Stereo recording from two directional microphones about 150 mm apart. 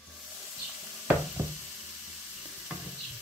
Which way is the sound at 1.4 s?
15° right (ahead or behind).